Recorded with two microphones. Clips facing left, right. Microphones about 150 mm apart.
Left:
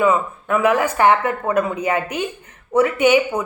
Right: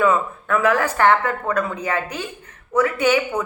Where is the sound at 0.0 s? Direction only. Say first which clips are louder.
Left 1 dB; 15° left (ahead or behind).